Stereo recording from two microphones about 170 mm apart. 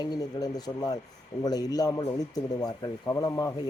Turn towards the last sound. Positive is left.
turn(degrees=20)  # may be behind; listen again after turning